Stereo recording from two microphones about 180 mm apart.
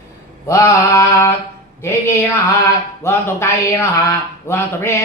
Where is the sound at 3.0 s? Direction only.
15° left (ahead or behind).